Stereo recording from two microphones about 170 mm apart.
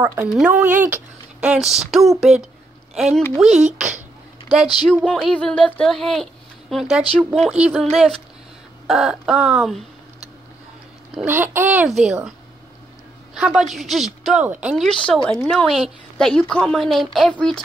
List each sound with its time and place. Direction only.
0.0 s a child's voice: 15° right (ahead or behind)
3.4 s a woman's voice: centre (ahead or behind)
5.0 s a woman's voice: 5° left (ahead or behind)
11.2 s a child's voice: 10° right (ahead or behind)
13.3 s a woman's voice: 5° right (ahead or behind)
14.9 s a woman's voice: 5° left (ahead or behind)